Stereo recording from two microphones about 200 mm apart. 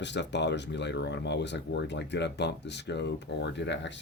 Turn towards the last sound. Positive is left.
turn(degrees=60)  # may be behind; listen again after turning